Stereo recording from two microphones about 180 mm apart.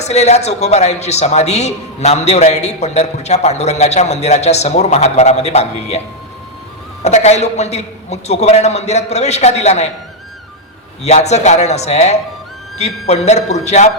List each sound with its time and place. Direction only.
0.0 s a man's voice: 40° left (ahead or behind)
7.0 s a man's voice: 40° left (ahead or behind)
11.0 s a man's voice: 40° left (ahead or behind)